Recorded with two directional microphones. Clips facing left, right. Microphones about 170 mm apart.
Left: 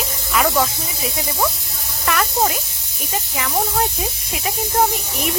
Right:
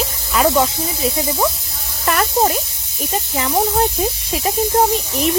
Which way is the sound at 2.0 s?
35° right (ahead or behind).